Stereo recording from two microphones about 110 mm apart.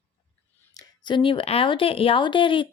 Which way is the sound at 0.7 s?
40° left (ahead or behind).